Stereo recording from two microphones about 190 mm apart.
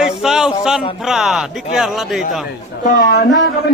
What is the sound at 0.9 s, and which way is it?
Speech, centre (ahead or behind).